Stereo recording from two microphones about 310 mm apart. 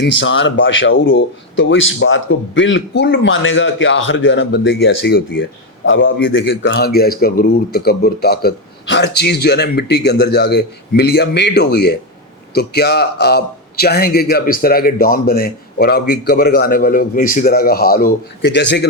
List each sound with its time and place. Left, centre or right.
0.0 s a man's voice: left